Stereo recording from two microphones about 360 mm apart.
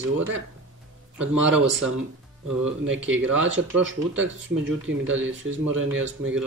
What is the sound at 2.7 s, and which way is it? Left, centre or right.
Speech, right.